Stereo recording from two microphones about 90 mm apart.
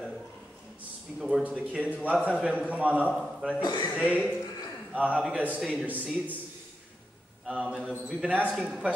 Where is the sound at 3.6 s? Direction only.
55° left (ahead or behind).